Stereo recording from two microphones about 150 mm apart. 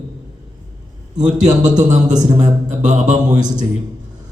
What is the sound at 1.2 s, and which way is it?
A man's voice, 55° right (ahead or behind).